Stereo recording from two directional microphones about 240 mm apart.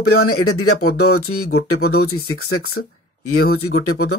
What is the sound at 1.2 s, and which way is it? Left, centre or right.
Speech, left.